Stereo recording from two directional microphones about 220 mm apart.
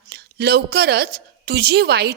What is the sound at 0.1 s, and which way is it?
A woman's voice, 45° right (ahead or behind).